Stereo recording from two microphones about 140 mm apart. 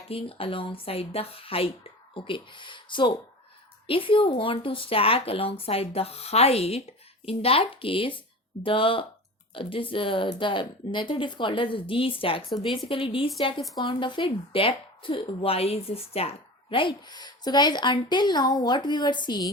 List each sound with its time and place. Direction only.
0.1 s speech: 40° left (ahead or behind)
12.5 s a woman's voice: centre (ahead or behind)
12.9 s speech: 40° left (ahead or behind)